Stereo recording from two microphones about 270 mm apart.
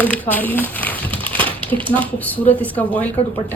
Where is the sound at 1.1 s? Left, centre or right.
Centre.